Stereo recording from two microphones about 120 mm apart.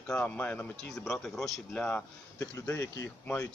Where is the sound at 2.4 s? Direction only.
30° left (ahead or behind).